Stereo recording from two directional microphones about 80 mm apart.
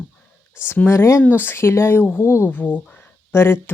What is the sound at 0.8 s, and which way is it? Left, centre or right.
Speech, left.